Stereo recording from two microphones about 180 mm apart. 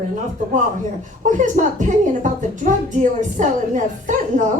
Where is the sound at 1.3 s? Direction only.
45° right (ahead or behind).